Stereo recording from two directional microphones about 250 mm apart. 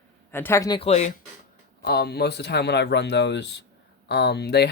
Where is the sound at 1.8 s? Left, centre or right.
Left.